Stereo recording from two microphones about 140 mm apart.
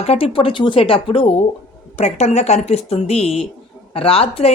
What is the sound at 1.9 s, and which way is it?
Speech, 55° left (ahead or behind).